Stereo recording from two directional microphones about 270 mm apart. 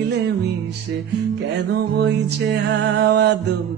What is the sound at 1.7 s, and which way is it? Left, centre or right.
Music, right.